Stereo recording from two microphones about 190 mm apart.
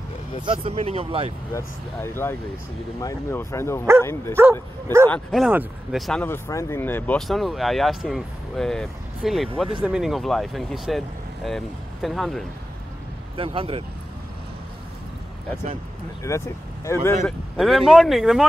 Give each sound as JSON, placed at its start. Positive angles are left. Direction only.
{"t": 0.5, "sound": "speech", "side_deg": -30}
{"t": 1.5, "sound": "speech", "side_deg": 15}
{"t": 6.2, "sound": "speech", "side_deg": 10}
{"t": 13.4, "sound": "speech", "side_deg": -30}
{"t": 16.2, "sound": "speech", "side_deg": 15}
{"t": 17.6, "sound": "speech", "side_deg": 0}